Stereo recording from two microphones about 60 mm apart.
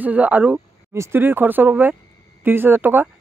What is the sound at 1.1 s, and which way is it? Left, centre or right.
Speech, right.